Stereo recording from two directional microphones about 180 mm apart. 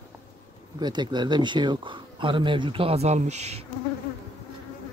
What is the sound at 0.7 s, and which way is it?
Speech, 25° right (ahead or behind).